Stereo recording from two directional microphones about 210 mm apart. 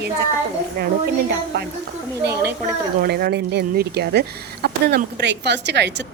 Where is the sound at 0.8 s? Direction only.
50° right (ahead or behind).